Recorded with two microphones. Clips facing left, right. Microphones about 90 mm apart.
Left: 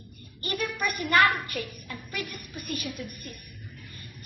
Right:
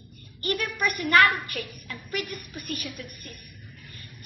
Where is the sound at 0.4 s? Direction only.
25° left (ahead or behind).